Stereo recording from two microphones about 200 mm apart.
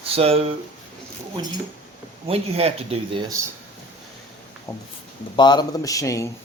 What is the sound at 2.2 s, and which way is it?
Speech, 30° right (ahead or behind).